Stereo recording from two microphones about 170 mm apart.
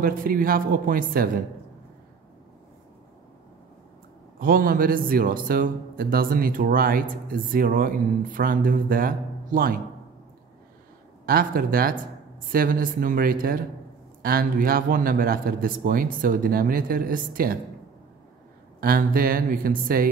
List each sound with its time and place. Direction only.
0.0 s speech: 55° right (ahead or behind)
4.4 s speech: 55° right (ahead or behind)
11.2 s speech: 60° right (ahead or behind)
18.8 s speech: 60° right (ahead or behind)